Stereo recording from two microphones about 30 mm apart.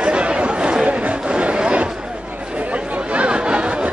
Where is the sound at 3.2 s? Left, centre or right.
Right.